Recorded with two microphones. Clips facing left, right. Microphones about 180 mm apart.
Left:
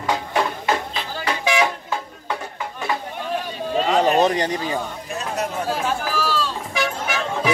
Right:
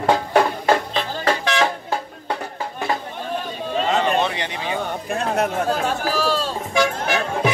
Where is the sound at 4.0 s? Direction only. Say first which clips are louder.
Left 7 dB; 40° left (ahead or behind).